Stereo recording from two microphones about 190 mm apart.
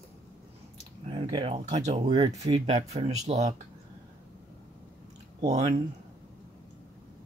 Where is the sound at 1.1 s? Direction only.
25° right (ahead or behind).